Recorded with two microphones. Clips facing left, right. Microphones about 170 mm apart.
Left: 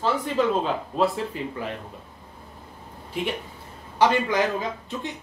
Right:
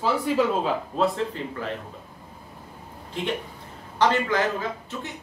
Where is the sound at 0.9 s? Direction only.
5° left (ahead or behind).